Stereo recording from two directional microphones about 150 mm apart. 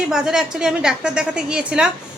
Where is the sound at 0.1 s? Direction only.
5° right (ahead or behind).